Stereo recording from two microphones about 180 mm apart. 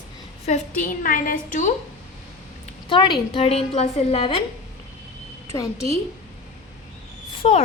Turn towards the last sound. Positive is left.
turn(degrees=35)  # may be behind; listen again after turning